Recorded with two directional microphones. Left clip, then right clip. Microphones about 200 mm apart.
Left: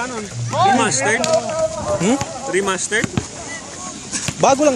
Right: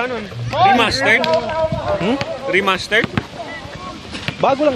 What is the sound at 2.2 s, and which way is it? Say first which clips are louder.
Speech: right 3 dB; 45° right (ahead or behind).